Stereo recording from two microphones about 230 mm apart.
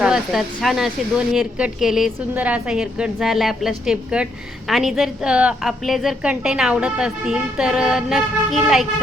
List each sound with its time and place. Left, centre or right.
0.0 s speech: centre